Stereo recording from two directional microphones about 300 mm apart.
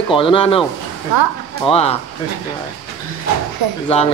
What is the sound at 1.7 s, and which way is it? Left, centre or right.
Speech, centre.